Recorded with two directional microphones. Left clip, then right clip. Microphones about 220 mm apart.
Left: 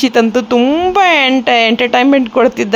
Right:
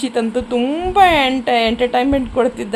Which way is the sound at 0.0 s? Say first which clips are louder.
Left 8 dB; 25° left (ahead or behind).